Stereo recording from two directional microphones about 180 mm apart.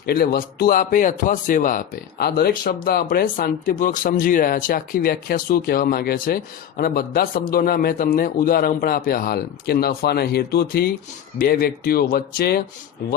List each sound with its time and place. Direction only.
0.0 s a man's voice: 60° left (ahead or behind)